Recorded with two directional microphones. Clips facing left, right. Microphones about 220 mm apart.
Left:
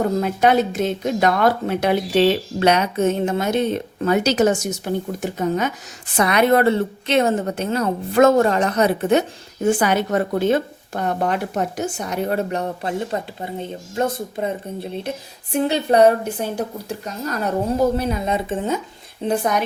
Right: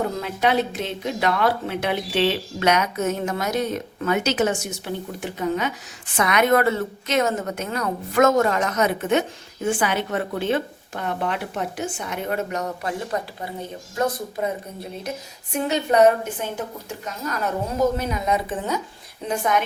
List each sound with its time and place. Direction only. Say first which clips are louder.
0.2 s speech: left 5 dB; 45° left (ahead or behind); by 18.8 s 25° left (ahead or behind)
19.3 s speech: left 2 dB; 35° left (ahead or behind)